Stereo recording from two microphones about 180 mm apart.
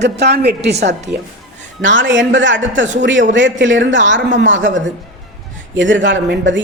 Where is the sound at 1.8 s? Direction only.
90° right.